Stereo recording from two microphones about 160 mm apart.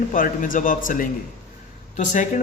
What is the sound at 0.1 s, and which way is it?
Speech, 55° left (ahead or behind).